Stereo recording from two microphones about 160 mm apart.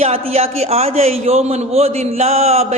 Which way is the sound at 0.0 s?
40° right (ahead or behind).